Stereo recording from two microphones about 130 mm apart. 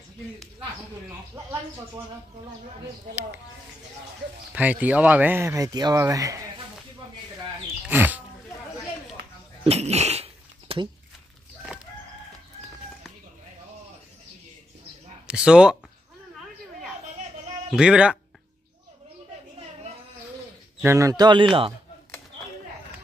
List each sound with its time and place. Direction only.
4.5 s speech: 10° right (ahead or behind)
7.9 s speech: 15° right (ahead or behind)
9.7 s dog: 55° right (ahead or behind)
15.2 s speech: 5° right (ahead or behind)
17.6 s speech: 5° right (ahead or behind)
20.8 s speech: 25° right (ahead or behind); by 21.7 s 40° right (ahead or behind)